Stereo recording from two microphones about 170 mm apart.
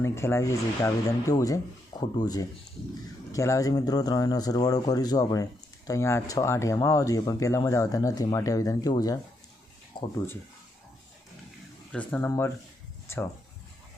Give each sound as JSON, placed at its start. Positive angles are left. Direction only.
{"t": 0.0, "sound": "speech", "side_deg": 15}
{"t": 11.9, "sound": "speech", "side_deg": 5}